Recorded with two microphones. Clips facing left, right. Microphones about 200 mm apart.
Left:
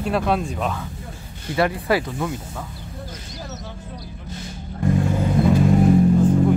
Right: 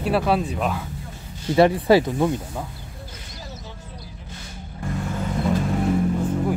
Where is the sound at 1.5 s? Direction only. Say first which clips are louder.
Right 5 dB; 25° right (ahead or behind).